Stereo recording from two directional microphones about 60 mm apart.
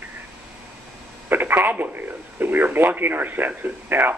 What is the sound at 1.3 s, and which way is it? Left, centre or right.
Speech, right.